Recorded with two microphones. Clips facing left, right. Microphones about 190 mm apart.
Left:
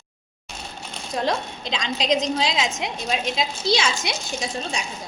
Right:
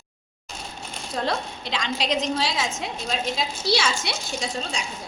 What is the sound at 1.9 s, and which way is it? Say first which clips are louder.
A woman's voice: left 3 dB; 20° left (ahead or behind).